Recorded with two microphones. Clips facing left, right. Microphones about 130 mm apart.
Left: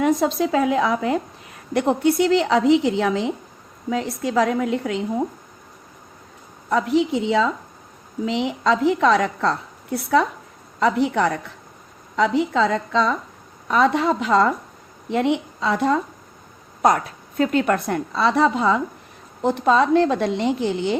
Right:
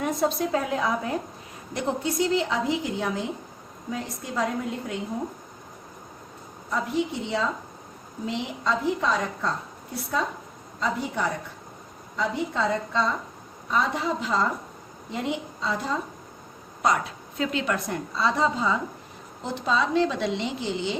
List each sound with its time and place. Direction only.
0.0 s a woman's voice: 90° left
1.7 s a woman's voice: 65° left (ahead or behind); by 5.0 s 90° left
6.7 s a woman's voice: 80° left
12.1 s a woman's voice: 85° left
13.7 s a woman's voice: 70° left (ahead or behind)
16.8 s a woman's voice: 50° left (ahead or behind); by 18.8 s 65° left (ahead or behind)
19.4 s a woman's voice: 55° left (ahead or behind)